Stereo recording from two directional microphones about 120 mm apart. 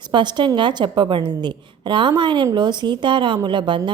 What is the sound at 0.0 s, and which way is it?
A woman's voice, 40° right (ahead or behind).